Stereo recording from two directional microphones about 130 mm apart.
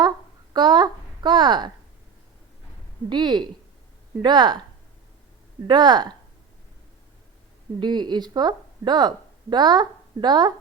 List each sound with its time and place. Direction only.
0.5 s a child's voice: 35° right (ahead or behind)
3.1 s speech: 35° right (ahead or behind)
5.6 s speech: 35° right (ahead or behind)
7.8 s speech: 35° right (ahead or behind)